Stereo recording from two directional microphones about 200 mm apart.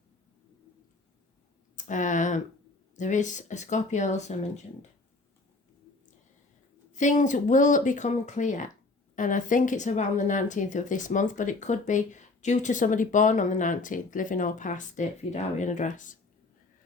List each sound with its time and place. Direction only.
1.7 s a sound: 40° left (ahead or behind)
2.9 s a woman's voice: 40° left (ahead or behind)
6.9 s a woman's voice: 40° left (ahead or behind)